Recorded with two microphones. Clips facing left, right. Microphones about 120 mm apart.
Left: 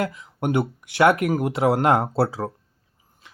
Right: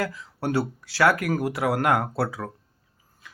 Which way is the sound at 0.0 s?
20° left (ahead or behind).